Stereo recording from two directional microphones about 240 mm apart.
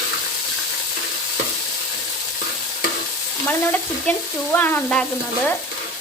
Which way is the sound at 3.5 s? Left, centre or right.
Centre.